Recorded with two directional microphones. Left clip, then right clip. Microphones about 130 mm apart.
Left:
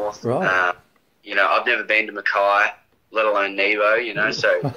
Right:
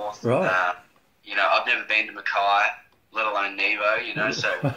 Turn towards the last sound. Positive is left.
turn(degrees=50)  # may be behind; listen again after turning